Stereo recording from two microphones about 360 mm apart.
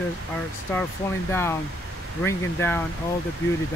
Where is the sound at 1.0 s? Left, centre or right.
Centre.